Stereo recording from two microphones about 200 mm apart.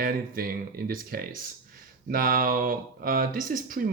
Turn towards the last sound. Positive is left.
turn(degrees=-45)  # may be behind; listen again after turning